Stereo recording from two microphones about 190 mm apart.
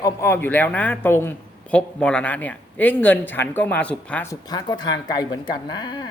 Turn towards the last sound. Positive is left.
turn(degrees=20)  # may be behind; listen again after turning